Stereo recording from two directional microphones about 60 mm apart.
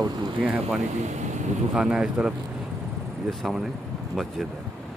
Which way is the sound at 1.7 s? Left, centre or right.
Centre.